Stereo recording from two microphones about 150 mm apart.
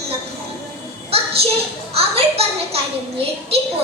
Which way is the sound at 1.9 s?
40° right (ahead or behind).